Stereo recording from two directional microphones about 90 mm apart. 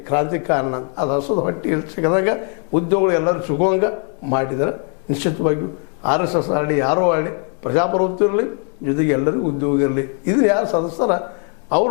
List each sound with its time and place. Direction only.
0.1 s a man's voice: 20° left (ahead or behind)